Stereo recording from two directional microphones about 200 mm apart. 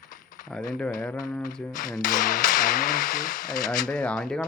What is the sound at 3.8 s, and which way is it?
Speech, 5° left (ahead or behind).